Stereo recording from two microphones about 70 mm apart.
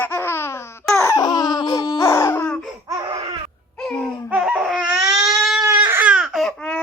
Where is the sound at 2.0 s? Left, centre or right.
Left.